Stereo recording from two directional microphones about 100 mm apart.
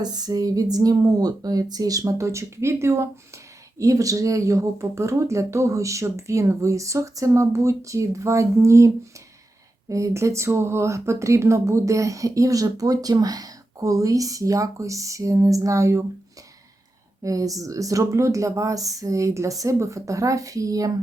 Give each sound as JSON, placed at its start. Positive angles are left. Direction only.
{"t": 0.0, "sound": "speech", "side_deg": -40}
{"t": 9.9, "sound": "speech", "side_deg": -30}
{"t": 17.2, "sound": "speech", "side_deg": -35}